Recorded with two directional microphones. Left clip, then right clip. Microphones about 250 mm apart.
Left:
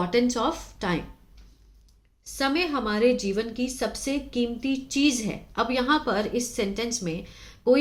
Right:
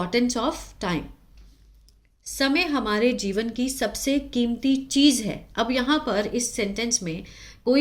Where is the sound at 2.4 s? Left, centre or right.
Right.